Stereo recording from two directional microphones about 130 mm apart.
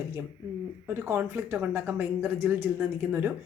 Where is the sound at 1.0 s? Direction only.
15° right (ahead or behind).